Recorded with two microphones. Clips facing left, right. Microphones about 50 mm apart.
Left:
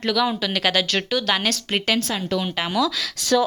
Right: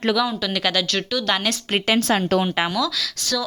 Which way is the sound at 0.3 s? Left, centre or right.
Centre.